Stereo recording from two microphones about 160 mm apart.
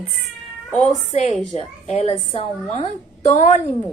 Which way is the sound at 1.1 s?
45° left (ahead or behind).